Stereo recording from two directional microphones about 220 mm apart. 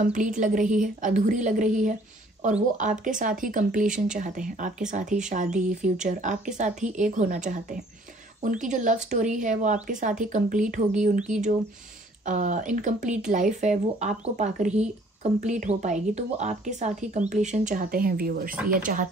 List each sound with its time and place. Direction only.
0.0 s speech: 35° right (ahead or behind)